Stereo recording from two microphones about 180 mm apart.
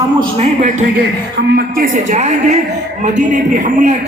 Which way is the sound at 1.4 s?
60° right (ahead or behind).